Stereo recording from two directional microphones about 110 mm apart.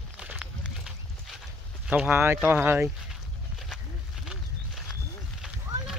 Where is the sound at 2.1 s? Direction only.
20° right (ahead or behind).